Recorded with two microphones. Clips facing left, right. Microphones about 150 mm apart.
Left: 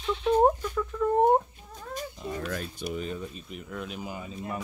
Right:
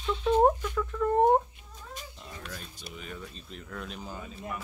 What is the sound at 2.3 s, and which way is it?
Speech, 60° left (ahead or behind).